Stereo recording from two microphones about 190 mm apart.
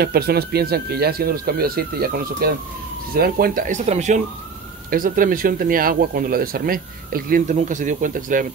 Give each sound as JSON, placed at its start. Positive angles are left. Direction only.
{"t": 0.0, "sound": "speech", "side_deg": -55}